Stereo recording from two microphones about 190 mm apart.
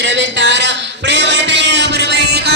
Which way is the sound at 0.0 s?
70° right (ahead or behind).